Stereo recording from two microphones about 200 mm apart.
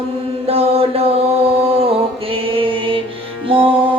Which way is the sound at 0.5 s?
30° right (ahead or behind).